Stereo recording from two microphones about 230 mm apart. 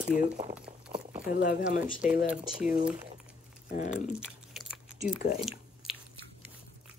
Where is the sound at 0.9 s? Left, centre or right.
Right.